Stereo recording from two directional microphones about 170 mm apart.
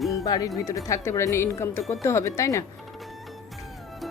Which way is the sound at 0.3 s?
20° left (ahead or behind).